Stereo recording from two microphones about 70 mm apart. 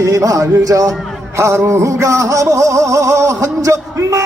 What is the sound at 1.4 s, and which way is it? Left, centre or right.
Music, right.